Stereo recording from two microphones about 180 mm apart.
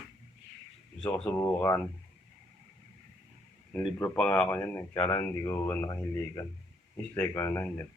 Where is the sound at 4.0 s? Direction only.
5° left (ahead or behind).